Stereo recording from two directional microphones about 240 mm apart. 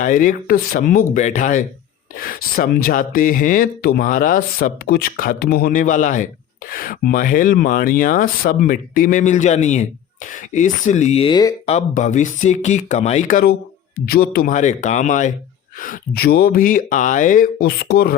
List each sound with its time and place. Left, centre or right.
0.0 s speech: left